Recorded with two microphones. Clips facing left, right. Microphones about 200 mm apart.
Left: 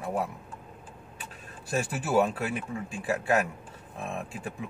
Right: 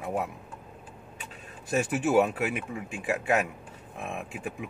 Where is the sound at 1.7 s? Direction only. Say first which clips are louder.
Right 3 dB; 20° right (ahead or behind).